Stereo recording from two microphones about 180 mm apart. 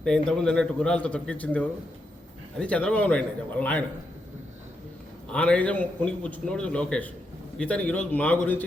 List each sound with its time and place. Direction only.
0.0 s a man's voice: 5° left (ahead or behind)
5.3 s a man's voice: 5° left (ahead or behind)